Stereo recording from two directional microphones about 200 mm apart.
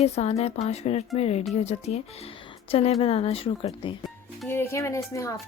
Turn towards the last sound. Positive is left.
turn(degrees=15)  # may be behind; listen again after turning